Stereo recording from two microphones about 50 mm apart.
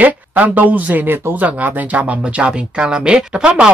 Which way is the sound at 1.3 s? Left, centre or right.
Right.